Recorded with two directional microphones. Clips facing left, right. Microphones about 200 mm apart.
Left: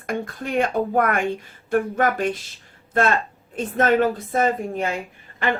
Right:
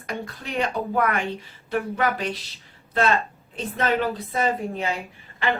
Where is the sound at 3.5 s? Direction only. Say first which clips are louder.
Left 5 dB; 50° left (ahead or behind).